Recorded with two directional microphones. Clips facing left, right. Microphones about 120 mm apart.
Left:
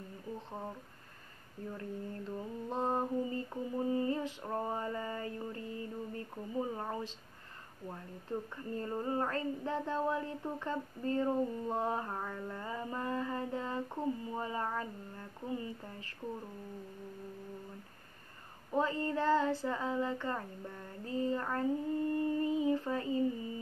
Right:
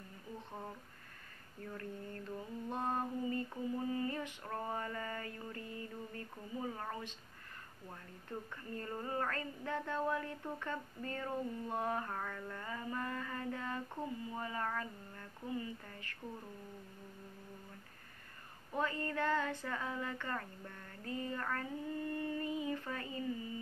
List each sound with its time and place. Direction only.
1.8 s mantra: 20° left (ahead or behind)
7.9 s female singing: 20° left (ahead or behind)
18.7 s female singing: 25° left (ahead or behind)